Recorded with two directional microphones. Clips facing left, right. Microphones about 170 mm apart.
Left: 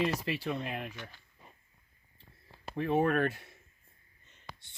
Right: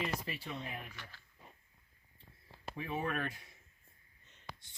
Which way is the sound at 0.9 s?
20° left (ahead or behind).